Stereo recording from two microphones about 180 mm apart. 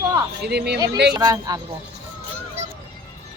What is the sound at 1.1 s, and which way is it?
Speech, 20° right (ahead or behind).